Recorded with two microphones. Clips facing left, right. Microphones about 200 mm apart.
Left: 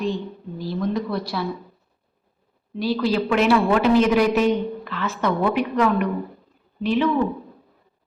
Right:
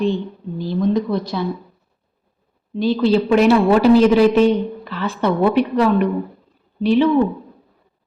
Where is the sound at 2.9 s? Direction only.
25° right (ahead or behind).